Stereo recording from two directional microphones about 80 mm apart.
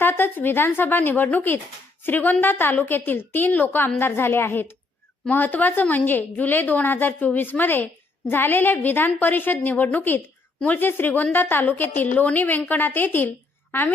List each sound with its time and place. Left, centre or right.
0.0 s a woman's voice: left